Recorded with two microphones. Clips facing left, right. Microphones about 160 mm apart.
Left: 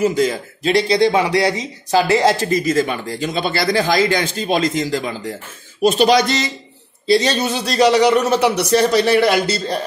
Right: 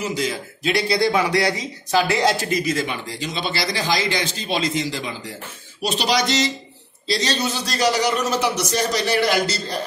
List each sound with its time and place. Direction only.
0.0 s a man's voice: 50° left (ahead or behind)
0.8 s speech: 25° left (ahead or behind)
2.6 s a man's voice: 45° left (ahead or behind)